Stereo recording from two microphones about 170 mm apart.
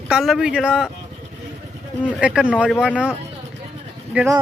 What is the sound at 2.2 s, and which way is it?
Speech, 5° right (ahead or behind).